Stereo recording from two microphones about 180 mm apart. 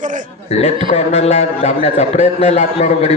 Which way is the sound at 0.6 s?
35° left (ahead or behind).